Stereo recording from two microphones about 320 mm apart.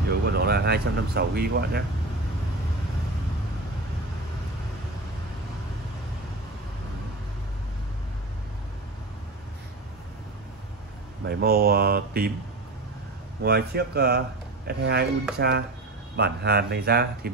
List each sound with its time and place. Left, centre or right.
0.3 s speech: right
11.2 s speech: right
13.4 s speech: right